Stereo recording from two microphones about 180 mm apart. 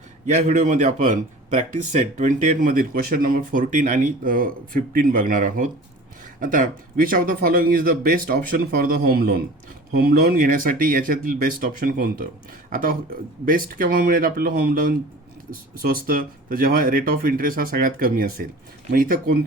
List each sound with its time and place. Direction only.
0.3 s a man's voice: 45° right (ahead or behind)